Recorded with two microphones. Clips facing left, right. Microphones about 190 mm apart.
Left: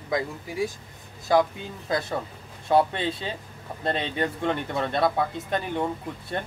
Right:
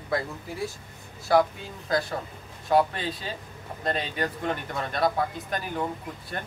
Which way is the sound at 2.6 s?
25° left (ahead or behind).